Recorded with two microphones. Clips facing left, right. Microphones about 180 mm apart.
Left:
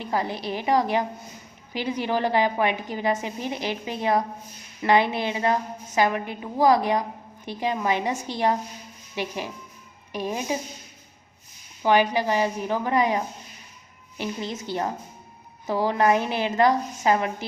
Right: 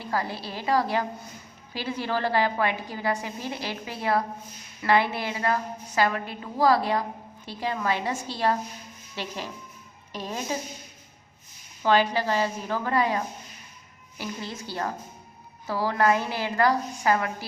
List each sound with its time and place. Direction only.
0.0 s a woman's voice: 20° left (ahead or behind)
11.8 s a woman's voice: 15° left (ahead or behind)